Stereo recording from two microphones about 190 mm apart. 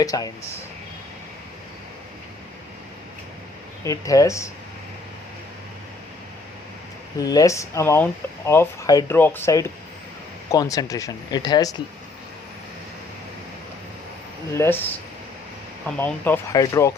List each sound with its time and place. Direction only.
0.0 s speech: 20° left (ahead or behind)
3.8 s speech: 15° left (ahead or behind)
7.2 s speech: 20° left (ahead or behind)
14.5 s speech: 10° left (ahead or behind)
16.0 s speech: 10° left (ahead or behind)